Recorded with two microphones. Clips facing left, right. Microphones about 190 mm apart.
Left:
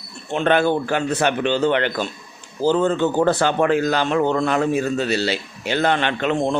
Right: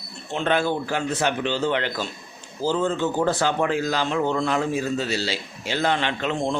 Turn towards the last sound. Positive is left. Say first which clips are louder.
# left 4 dB
turn(degrees=65)  # may be behind; listen again after turning